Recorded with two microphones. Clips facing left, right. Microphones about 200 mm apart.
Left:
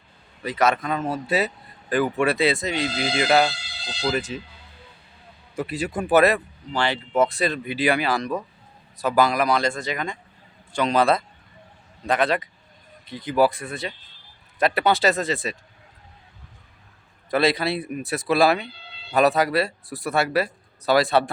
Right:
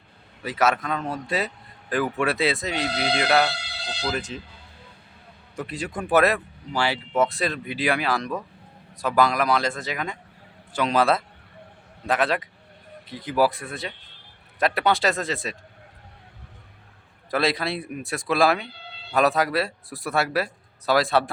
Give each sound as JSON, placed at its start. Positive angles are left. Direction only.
{"t": 0.4, "sound": "speech", "side_deg": -5}
{"t": 2.8, "sound": "speech", "side_deg": -65}
{"t": 3.4, "sound": "a sound", "side_deg": -65}
{"t": 4.1, "sound": "speech", "side_deg": 5}
{"t": 5.5, "sound": "speech", "side_deg": 5}
{"t": 13.9, "sound": "speech", "side_deg": -65}
{"t": 14.6, "sound": "speech", "side_deg": 0}
{"t": 17.3, "sound": "speech", "side_deg": 0}